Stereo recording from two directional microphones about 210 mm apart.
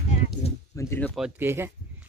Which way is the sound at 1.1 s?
5° right (ahead or behind).